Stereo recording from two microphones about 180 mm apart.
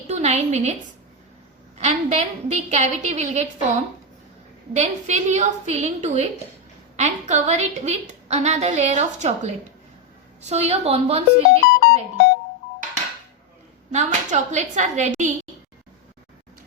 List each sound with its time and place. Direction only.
0.1 s a woman's voice: 40° right (ahead or behind)
1.8 s a woman's voice: 40° right (ahead or behind)
4.7 s a woman's voice: 40° right (ahead or behind)
13.9 s a woman's voice: 40° right (ahead or behind)